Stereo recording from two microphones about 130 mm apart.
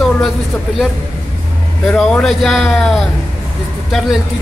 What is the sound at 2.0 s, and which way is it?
Speech, 5° left (ahead or behind).